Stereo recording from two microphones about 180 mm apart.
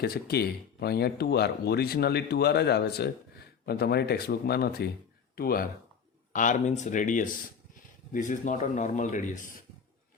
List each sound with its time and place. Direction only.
0.0 s speech: 60° left (ahead or behind)
6.3 s a man's voice: 45° left (ahead or behind)